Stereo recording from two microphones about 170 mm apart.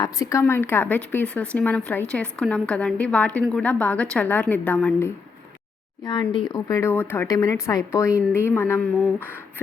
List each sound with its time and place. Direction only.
0.0 s a woman's voice: 20° left (ahead or behind)
6.1 s a woman's voice: 25° left (ahead or behind)